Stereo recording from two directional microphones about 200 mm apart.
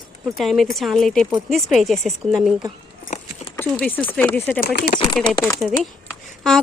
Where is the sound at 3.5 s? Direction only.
10° left (ahead or behind).